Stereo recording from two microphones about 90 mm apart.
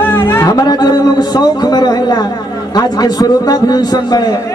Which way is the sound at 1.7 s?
50° left (ahead or behind).